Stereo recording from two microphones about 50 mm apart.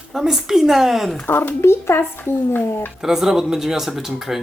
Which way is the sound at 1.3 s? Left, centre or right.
Left.